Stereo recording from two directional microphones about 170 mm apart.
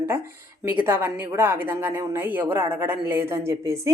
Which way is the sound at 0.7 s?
10° right (ahead or behind).